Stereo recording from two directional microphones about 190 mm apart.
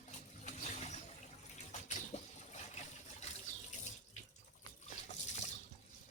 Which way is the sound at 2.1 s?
35° left (ahead or behind).